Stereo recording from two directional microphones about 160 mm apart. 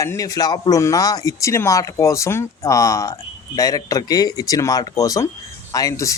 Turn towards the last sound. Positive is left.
turn(degrees=20)  # may be behind; listen again after turning